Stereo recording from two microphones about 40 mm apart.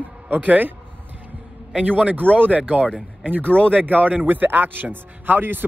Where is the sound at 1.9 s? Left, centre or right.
Right.